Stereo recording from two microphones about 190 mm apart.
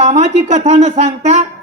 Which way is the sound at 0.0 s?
35° right (ahead or behind).